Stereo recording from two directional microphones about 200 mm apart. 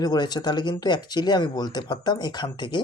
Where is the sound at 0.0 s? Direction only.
20° left (ahead or behind).